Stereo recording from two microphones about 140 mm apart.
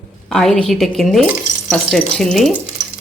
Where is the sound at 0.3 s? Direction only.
Centre (ahead or behind).